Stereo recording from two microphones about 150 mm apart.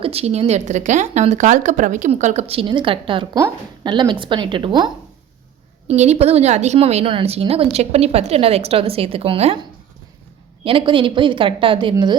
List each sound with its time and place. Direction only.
0.0 s a woman's voice: 40° right (ahead or behind)
5.9 s a woman's voice: 45° right (ahead or behind)
10.6 s a woman's voice: 35° right (ahead or behind)